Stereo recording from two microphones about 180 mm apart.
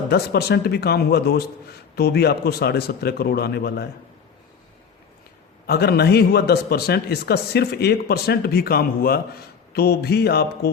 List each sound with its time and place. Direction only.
0.1 s speech: 65° left (ahead or behind)
5.6 s speech: 60° left (ahead or behind)